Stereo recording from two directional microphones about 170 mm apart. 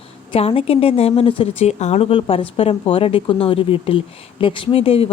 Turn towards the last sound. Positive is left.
turn(degrees=35)  # may be behind; listen again after turning